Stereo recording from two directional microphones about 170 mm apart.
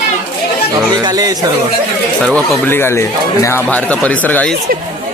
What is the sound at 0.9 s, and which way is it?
Speech, 25° right (ahead or behind).